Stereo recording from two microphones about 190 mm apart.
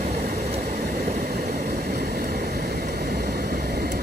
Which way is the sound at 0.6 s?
55° right (ahead or behind).